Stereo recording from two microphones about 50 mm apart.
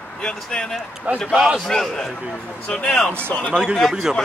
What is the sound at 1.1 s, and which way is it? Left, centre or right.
Speech, right.